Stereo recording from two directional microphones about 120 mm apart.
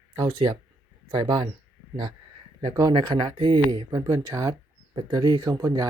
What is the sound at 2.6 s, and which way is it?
Speech, 35° right (ahead or behind).